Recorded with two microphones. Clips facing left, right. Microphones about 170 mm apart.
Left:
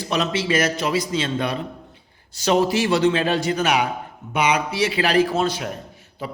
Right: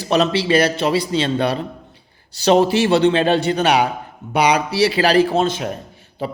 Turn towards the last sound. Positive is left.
turn(degrees=-30)  # may be behind; listen again after turning